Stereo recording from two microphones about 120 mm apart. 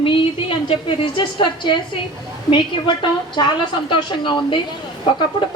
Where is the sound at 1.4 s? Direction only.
40° left (ahead or behind).